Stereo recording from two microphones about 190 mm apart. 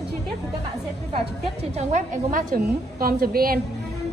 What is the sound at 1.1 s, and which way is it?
A woman's voice, 35° right (ahead or behind).